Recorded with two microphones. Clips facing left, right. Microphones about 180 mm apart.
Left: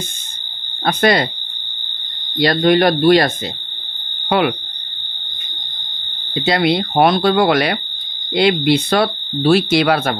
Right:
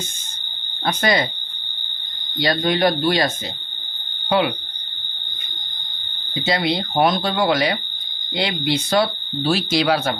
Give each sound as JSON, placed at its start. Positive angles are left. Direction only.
{"t": 0.8, "sound": "speech", "side_deg": 60}
{"t": 2.4, "sound": "speech", "side_deg": 65}
{"t": 4.3, "sound": "speech", "side_deg": 60}
{"t": 6.3, "sound": "speech", "side_deg": 65}